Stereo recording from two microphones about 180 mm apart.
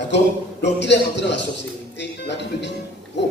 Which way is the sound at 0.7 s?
75° left (ahead or behind).